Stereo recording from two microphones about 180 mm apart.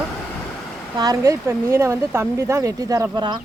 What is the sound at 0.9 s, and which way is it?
Speech, 20° right (ahead or behind).